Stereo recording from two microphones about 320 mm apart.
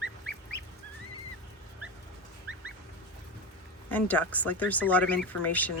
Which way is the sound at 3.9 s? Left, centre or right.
Centre.